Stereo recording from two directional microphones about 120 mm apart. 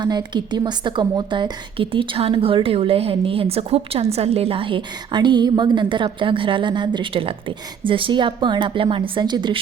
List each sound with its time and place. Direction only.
0.0 s a woman's voice: 35° right (ahead or behind)